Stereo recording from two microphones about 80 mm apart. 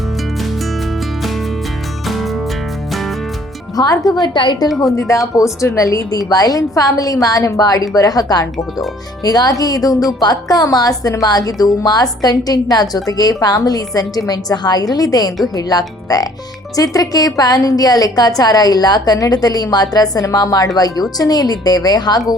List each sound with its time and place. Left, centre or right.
2.0 s music: centre
3.8 s speech: left
4.8 s a woman's voice: left